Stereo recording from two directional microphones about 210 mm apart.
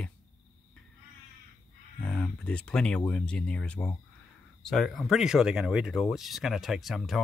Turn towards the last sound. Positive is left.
turn(degrees=0)  # may be behind; listen again after turning